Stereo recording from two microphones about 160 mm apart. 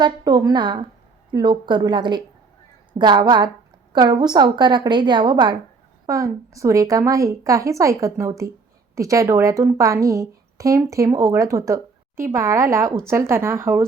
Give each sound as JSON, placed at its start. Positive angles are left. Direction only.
{"t": 0.0, "sound": "a woman's voice", "side_deg": -25}